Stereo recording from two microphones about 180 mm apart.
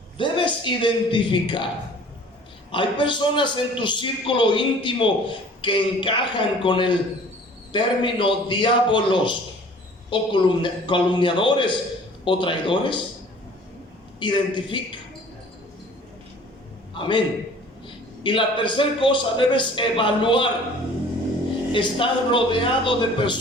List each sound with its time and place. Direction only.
0.2 s a man's voice: 25° left (ahead or behind)
2.7 s a man's voice: 25° left (ahead or behind)
14.2 s a man's voice: 25° left (ahead or behind)
17.0 s a man's voice: 25° left (ahead or behind)
21.7 s a man's voice: 30° left (ahead or behind)